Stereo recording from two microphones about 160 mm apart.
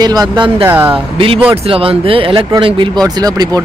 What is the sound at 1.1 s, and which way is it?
Speech, 35° right (ahead or behind).